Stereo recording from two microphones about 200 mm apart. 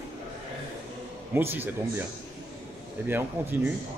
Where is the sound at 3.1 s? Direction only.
10° right (ahead or behind).